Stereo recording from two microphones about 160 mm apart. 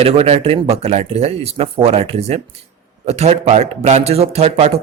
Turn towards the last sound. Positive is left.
turn(degrees=-40)  # may be behind; listen again after turning